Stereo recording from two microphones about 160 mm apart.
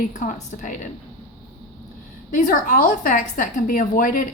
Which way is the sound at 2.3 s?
55° left (ahead or behind).